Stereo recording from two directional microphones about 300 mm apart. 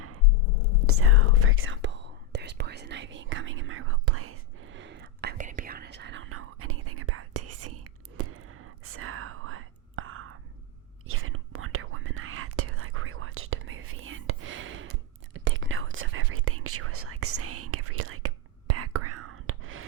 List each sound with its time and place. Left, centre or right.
0.9 s whispering: right